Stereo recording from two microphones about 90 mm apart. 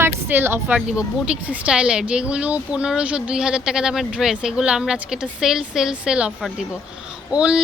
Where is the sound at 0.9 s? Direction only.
10° right (ahead or behind).